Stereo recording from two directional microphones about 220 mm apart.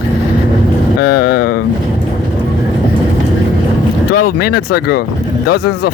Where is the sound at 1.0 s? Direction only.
45° left (ahead or behind).